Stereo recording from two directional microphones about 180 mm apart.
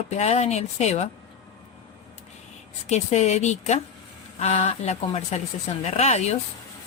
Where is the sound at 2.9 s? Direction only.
35° left (ahead or behind).